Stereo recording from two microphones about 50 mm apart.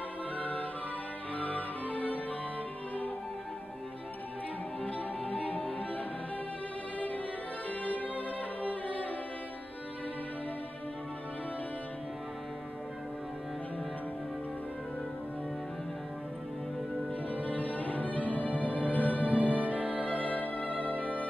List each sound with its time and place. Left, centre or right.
0.4 s music: left
4.8 s music: left
7.8 s music: left
17.3 s music: left
19.3 s music: right
20.1 s music: left